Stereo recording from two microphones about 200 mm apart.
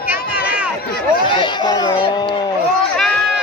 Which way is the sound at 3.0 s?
5° left (ahead or behind).